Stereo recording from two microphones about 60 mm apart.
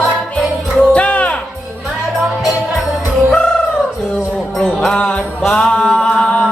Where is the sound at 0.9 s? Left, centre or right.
Left.